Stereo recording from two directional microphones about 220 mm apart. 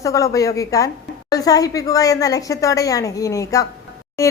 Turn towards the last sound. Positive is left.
turn(degrees=15)  # may be behind; listen again after turning